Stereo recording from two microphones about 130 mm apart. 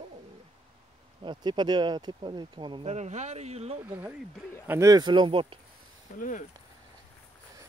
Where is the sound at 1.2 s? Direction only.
35° right (ahead or behind).